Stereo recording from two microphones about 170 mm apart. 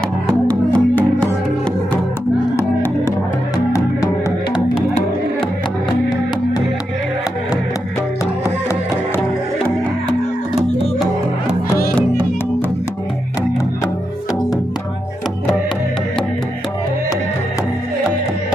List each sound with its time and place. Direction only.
0.5 s music: 5° left (ahead or behind)
2.5 s music: 15° left (ahead or behind)